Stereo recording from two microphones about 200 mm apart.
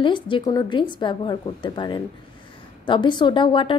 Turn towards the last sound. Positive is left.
turn(degrees=25)  # may be behind; listen again after turning